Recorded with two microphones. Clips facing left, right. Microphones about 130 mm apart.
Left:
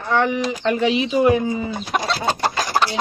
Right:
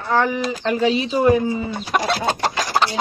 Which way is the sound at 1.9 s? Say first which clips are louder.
Right 2 dB; 60° right (ahead or behind).